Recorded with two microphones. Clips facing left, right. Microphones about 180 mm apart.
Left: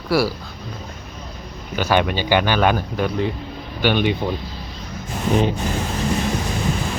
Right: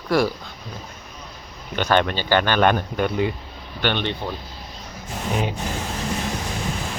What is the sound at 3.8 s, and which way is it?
Speech, 10° left (ahead or behind).